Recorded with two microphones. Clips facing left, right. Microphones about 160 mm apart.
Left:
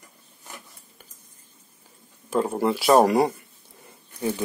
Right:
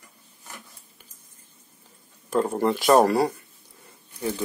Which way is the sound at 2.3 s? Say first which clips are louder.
Even; 10° left (ahead or behind).